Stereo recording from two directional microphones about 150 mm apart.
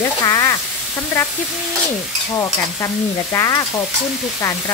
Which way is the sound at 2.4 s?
20° left (ahead or behind).